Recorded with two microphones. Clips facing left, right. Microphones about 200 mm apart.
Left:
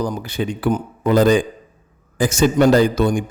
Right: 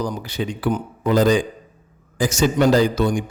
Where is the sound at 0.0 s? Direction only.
55° left (ahead or behind).